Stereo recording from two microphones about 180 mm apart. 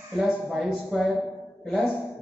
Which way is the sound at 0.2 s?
Centre (ahead or behind).